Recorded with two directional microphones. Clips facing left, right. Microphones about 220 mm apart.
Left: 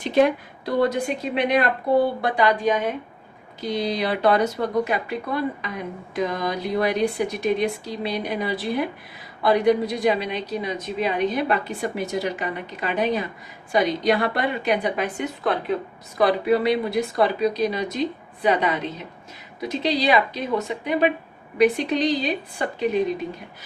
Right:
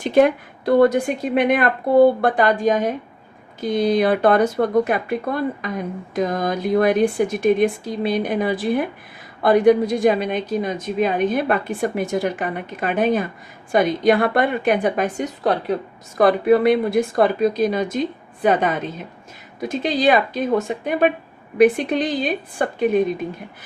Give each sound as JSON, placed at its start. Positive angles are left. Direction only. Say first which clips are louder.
{"t": 0.0, "sound": "speech", "louder": "right 3 dB", "side_deg": -50}